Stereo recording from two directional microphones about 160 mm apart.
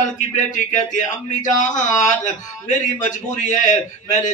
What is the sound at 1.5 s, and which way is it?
Speech, 50° left (ahead or behind).